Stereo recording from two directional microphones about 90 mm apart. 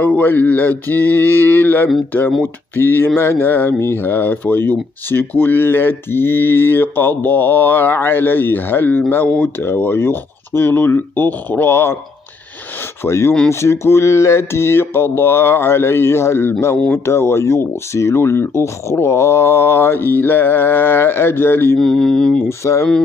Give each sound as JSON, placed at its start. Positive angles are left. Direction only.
{"t": 0.0, "sound": "speech", "side_deg": 20}
{"t": 13.0, "sound": "speech", "side_deg": 30}
{"t": 16.7, "sound": "speech", "side_deg": 5}
{"t": 17.0, "sound": "speech", "side_deg": 30}
{"t": 21.7, "sound": "mantra", "side_deg": 5}
{"t": 22.5, "sound": "speech", "side_deg": 35}